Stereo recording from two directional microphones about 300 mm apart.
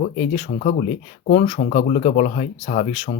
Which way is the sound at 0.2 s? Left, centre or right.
Left.